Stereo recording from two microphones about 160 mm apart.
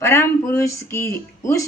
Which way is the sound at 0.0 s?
15° left (ahead or behind).